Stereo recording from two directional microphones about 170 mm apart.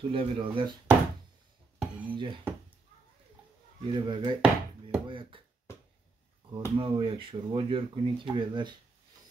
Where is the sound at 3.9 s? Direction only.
30° right (ahead or behind).